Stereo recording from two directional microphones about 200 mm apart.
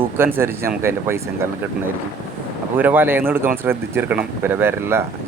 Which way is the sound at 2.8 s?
10° right (ahead or behind).